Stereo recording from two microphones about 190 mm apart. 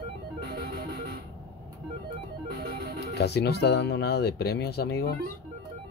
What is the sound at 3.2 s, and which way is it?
Speech, 60° left (ahead or behind).